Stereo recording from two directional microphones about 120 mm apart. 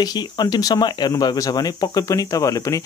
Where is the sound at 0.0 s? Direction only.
35° left (ahead or behind).